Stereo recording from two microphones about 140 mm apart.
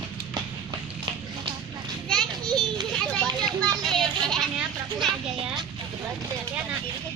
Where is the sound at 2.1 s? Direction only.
5° left (ahead or behind).